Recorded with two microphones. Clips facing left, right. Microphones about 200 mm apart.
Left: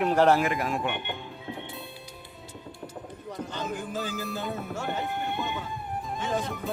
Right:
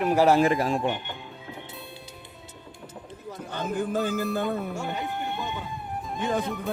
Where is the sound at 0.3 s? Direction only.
30° right (ahead or behind).